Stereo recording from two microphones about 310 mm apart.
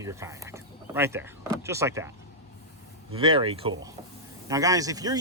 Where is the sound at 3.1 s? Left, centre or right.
Centre.